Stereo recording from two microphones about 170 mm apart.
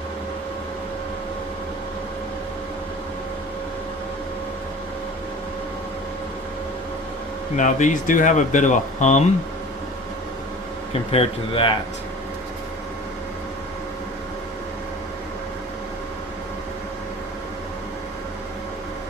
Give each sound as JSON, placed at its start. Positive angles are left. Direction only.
{"t": 7.5, "sound": "speech", "side_deg": 45}
{"t": 11.1, "sound": "a man's voice", "side_deg": 35}